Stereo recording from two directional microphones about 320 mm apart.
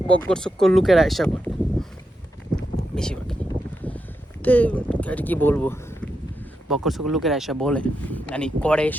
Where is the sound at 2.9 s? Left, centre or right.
Centre.